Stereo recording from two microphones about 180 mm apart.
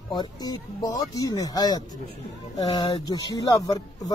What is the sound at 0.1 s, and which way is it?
Speech, 25° left (ahead or behind).